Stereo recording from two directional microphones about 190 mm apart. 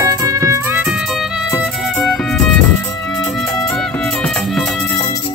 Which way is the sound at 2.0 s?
Centre (ahead or behind).